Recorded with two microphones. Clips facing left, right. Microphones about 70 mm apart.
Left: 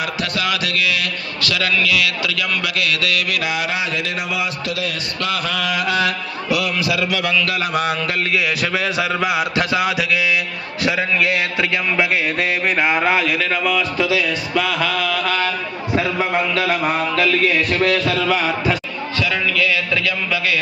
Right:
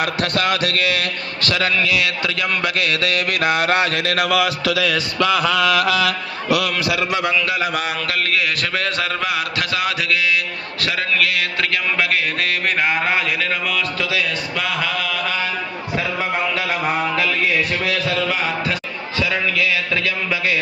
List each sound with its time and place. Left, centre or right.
0.0 s a man's voice: right
7.2 s speech: right
7.7 s a man's voice: centre
14.2 s mantra: centre
16.6 s mantra: centre
17.7 s a man's voice: centre
19.2 s speech: right